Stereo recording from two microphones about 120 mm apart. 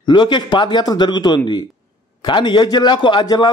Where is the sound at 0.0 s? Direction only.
40° left (ahead or behind).